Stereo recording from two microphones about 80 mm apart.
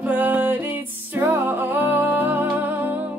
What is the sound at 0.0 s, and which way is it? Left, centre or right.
Music, right.